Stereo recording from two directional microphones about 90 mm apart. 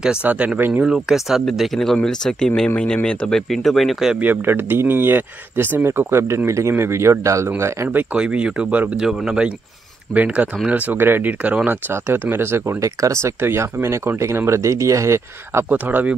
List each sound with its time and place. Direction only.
0.0 s speech: 10° right (ahead or behind)
0.8 s speech: 5° right (ahead or behind)
4.2 s speech: 20° right (ahead or behind)
7.9 s speech: 15° right (ahead or behind); by 15.6 s 30° right (ahead or behind)
15.7 s speech: 20° right (ahead or behind)